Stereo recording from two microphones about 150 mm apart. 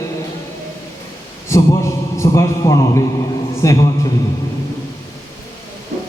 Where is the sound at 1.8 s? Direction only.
20° left (ahead or behind).